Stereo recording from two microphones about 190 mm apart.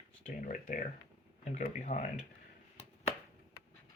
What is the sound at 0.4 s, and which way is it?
Speech, 45° left (ahead or behind).